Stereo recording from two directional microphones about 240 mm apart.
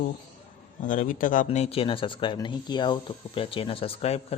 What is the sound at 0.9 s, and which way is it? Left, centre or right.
Speech, left.